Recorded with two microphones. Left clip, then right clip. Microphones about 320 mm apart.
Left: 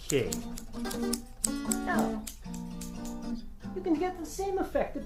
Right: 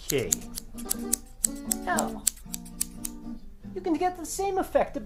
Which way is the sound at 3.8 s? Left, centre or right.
Centre.